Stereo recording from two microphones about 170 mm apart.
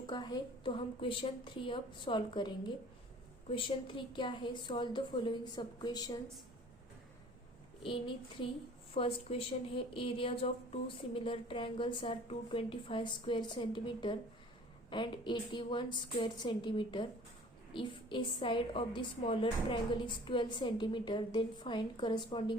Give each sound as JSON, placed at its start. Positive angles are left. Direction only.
{"t": 0.1, "sound": "a woman's voice", "side_deg": 25}
{"t": 7.8, "sound": "a woman's voice", "side_deg": 30}